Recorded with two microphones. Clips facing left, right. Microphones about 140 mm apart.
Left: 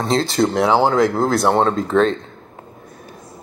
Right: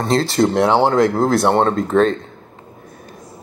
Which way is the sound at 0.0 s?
Centre (ahead or behind).